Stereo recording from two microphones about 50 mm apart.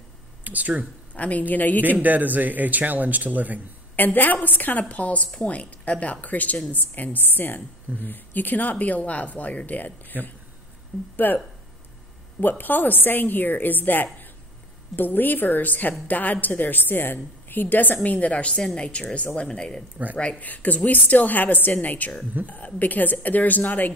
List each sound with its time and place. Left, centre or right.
0.4 s speech: right
1.1 s a woman's voice: left
2.0 s a man's voice: right
3.9 s a woman's voice: left
11.1 s a woman's voice: left; by 19.8 s centre
20.2 s a woman's voice: left